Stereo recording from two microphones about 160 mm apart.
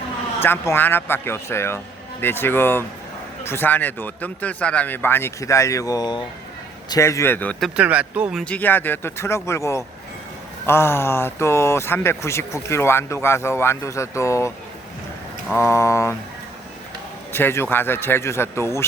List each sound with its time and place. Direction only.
0.3 s speech: 15° left (ahead or behind)
7.8 s speech: 10° right (ahead or behind)
8.5 s speech: 10° left (ahead or behind)
17.3 s speech: 15° left (ahead or behind)